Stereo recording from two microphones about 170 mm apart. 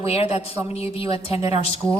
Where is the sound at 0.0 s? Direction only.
35° left (ahead or behind).